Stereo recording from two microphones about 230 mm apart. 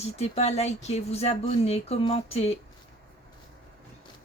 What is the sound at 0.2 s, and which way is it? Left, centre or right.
Speech, left.